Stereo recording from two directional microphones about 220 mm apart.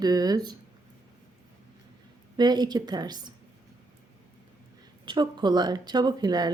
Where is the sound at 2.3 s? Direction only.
20° right (ahead or behind).